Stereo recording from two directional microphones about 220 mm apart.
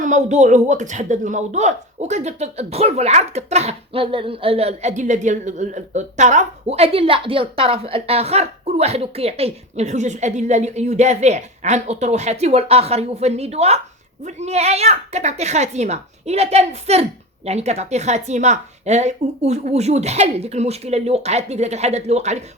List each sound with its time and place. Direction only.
0.0 s a woman's voice: 35° right (ahead or behind)